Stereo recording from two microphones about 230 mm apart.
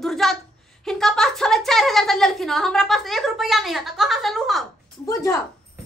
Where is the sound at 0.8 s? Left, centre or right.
Centre.